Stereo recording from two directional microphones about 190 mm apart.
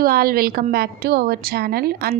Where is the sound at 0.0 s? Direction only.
50° right (ahead or behind).